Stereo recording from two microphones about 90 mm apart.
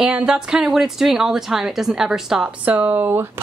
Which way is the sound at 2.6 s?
20° right (ahead or behind).